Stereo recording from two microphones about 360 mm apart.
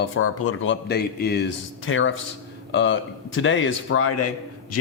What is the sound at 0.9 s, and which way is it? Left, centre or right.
A man's voice, left.